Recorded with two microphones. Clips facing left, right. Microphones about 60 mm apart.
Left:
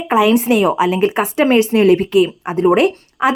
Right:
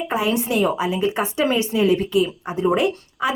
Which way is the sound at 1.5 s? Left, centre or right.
Left.